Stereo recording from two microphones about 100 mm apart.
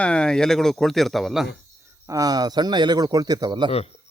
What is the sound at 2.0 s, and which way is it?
Speech, 35° right (ahead or behind).